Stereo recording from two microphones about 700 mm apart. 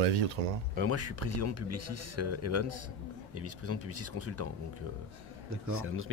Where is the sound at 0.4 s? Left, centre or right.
Right.